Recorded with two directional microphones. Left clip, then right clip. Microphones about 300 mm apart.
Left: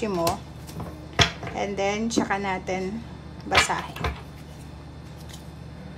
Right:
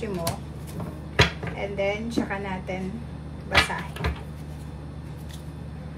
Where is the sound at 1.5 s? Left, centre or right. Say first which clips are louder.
Left 2 dB; centre.